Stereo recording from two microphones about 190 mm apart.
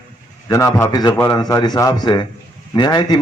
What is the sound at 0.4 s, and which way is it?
A man's voice, 15° left (ahead or behind).